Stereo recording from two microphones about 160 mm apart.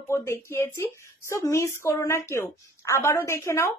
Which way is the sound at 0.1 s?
15° left (ahead or behind).